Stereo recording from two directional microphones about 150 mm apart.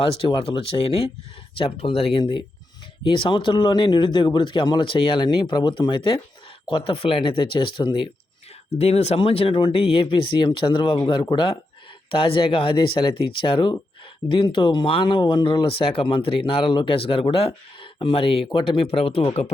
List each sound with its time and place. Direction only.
0.0 s speech: 35° left (ahead or behind)
8.7 s speech: 45° left (ahead or behind)